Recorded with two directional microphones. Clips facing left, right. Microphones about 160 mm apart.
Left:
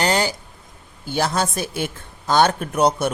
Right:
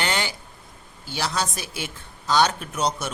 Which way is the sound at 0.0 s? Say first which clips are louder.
Left 6 dB; 40° left (ahead or behind).